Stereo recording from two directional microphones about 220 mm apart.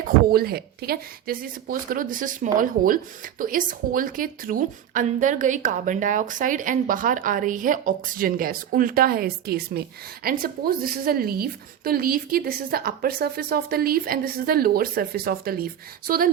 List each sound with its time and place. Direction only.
0.0 s a woman's voice: 45° right (ahead or behind)